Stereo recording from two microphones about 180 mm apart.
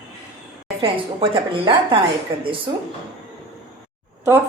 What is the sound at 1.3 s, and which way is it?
Speech, 30° right (ahead or behind).